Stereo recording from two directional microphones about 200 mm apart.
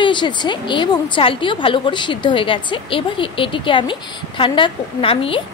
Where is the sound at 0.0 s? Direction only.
25° left (ahead or behind).